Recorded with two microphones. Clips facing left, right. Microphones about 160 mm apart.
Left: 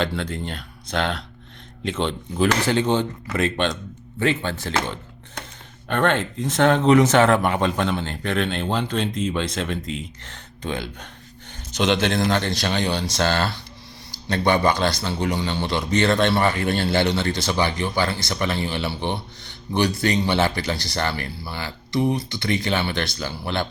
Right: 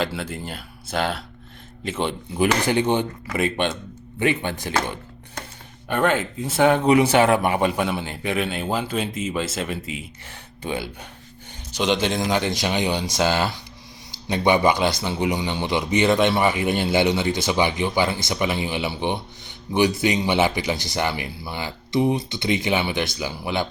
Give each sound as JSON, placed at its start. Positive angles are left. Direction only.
{"t": 0.0, "sound": "speech", "side_deg": -5}
{"t": 4.7, "sound": "a sound", "side_deg": -5}
{"t": 5.9, "sound": "speech", "side_deg": -5}